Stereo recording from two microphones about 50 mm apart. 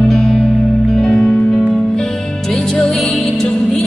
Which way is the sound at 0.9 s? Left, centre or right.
Centre.